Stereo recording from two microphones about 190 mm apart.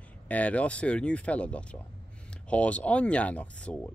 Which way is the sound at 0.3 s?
5° left (ahead or behind).